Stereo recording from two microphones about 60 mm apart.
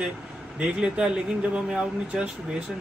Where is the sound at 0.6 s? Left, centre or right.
Centre.